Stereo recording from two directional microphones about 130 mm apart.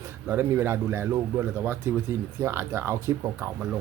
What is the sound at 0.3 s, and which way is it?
Speech, 20° right (ahead or behind).